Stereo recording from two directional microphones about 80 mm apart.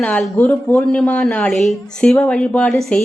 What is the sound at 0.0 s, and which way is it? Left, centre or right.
A woman's voice, centre.